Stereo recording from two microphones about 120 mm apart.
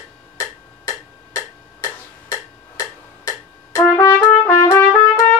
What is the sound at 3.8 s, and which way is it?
Trumpet, 30° left (ahead or behind).